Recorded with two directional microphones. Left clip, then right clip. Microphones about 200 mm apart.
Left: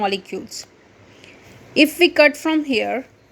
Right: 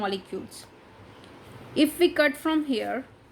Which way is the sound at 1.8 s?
30° left (ahead or behind).